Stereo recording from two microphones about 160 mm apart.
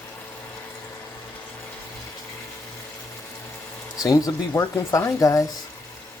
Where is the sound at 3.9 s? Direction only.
20° left (ahead or behind).